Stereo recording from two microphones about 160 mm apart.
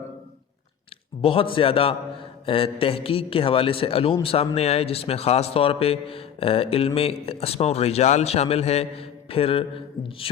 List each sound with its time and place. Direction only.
1.2 s a man's voice: 35° left (ahead or behind)